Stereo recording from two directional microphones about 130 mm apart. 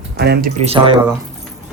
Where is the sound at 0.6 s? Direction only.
40° right (ahead or behind).